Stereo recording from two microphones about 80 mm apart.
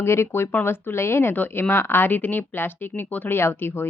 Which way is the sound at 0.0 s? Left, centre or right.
Left.